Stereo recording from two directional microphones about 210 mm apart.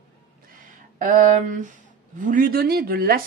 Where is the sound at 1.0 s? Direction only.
40° right (ahead or behind).